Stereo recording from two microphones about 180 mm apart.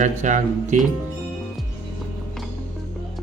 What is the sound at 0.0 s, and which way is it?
Speech, 45° right (ahead or behind).